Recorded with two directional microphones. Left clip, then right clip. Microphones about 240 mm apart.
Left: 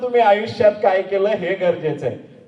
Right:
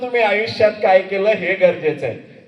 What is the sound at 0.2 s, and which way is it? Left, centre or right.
A man's voice, right.